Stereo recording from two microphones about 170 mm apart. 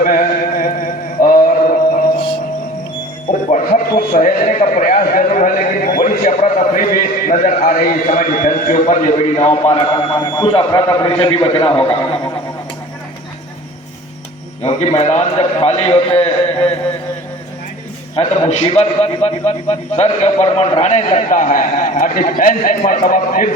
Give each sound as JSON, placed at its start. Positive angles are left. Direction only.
{"t": 0.0, "sound": "mantra", "side_deg": 55}
{"t": 2.1, "sound": "music", "side_deg": 30}
{"t": 3.5, "sound": "a sound", "side_deg": 50}
{"t": 9.7, "sound": "a man's voice", "side_deg": 25}
{"t": 14.6, "sound": "a man's voice", "side_deg": 35}
{"t": 18.2, "sound": "a man's voice", "side_deg": 40}